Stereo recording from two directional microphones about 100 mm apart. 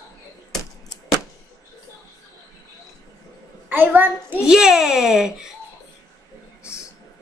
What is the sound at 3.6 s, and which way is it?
Speech, 20° right (ahead or behind).